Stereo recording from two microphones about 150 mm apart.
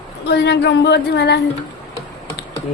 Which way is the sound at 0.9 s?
90° left.